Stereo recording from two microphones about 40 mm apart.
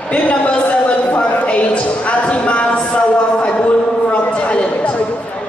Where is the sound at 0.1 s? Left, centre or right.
Left.